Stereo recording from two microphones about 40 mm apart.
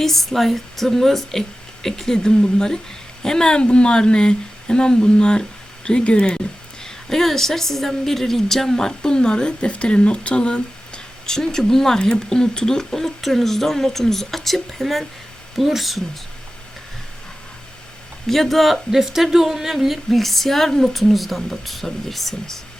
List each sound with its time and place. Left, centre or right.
0.0 s a woman's voice: centre; by 6.4 s left
6.8 s a woman's voice: centre
18.3 s speech: centre
20.1 s a woman's voice: centre